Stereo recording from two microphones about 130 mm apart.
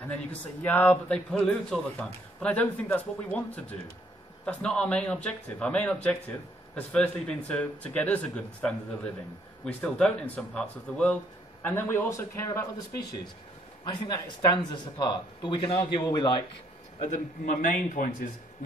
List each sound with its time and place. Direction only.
0.0 s a man's voice: 15° left (ahead or behind); by 16.4 s 35° left (ahead or behind)
17.0 s a man's voice: 80° left